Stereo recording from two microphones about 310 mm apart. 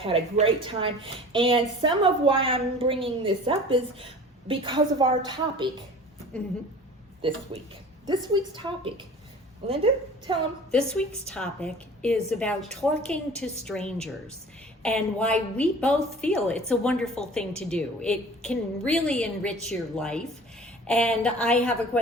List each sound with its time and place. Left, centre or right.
0.0 s a woman's voice: centre
7.2 s a woman's voice: centre
10.7 s a woman's voice: centre